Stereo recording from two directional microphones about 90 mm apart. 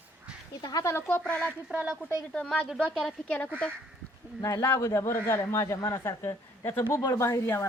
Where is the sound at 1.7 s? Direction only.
10° right (ahead or behind).